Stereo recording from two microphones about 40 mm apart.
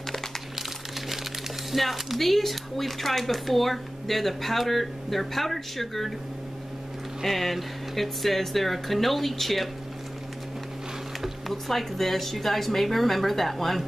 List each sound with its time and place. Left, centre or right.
0.6 s crumpling: centre
1.7 s speech: centre
7.2 s speech: centre
11.1 s a sound: centre
11.5 s speech: centre